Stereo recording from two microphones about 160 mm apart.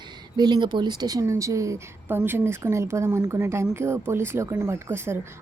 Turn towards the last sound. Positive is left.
turn(degrees=-15)  # may be behind; listen again after turning